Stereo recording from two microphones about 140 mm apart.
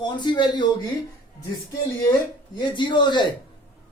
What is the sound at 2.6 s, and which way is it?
Speech, 35° left (ahead or behind).